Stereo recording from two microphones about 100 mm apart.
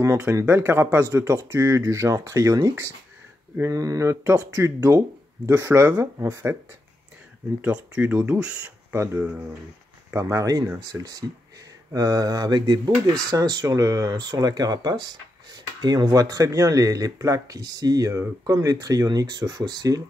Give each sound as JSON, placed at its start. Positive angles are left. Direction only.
{"t": 0.3, "sound": "speech", "side_deg": -30}
{"t": 7.6, "sound": "speech", "side_deg": -15}
{"t": 8.9, "sound": "speech", "side_deg": -25}